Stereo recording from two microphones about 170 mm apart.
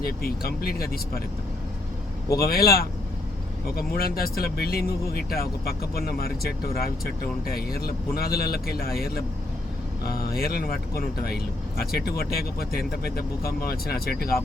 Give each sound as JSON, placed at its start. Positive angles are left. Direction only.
{"t": 0.0, "sound": "speech", "side_deg": 65}
{"t": 2.4, "sound": "speech", "side_deg": 65}